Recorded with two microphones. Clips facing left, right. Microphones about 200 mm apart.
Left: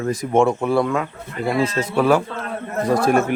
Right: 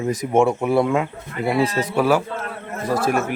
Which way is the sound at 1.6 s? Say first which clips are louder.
Left 1 dB; 10° right (ahead or behind).